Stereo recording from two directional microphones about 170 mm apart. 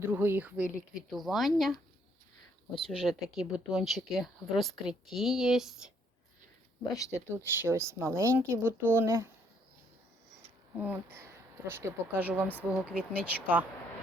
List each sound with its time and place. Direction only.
0.0 s speech: 15° right (ahead or behind)
6.9 s speech: 20° left (ahead or behind)
7.3 s speech: 15° right (ahead or behind)
10.8 s speech: 10° right (ahead or behind)